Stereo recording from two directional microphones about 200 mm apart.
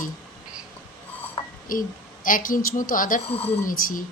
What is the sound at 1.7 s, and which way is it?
A woman's voice, 45° left (ahead or behind).